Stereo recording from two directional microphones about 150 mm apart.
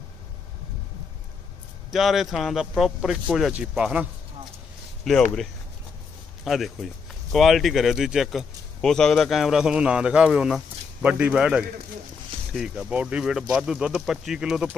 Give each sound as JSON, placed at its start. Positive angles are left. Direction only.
{"t": 1.9, "sound": "speech", "side_deg": 0}
{"t": 5.0, "sound": "speech", "side_deg": 5}